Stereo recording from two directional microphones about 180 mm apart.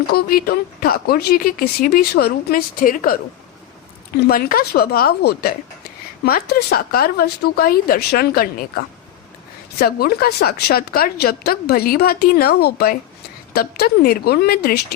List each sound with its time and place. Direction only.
0.1 s a woman's voice: 55° left (ahead or behind)
9.7 s a woman's voice: 60° left (ahead or behind)